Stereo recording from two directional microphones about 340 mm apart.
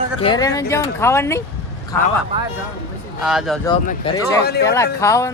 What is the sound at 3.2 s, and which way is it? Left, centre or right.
Speech, centre.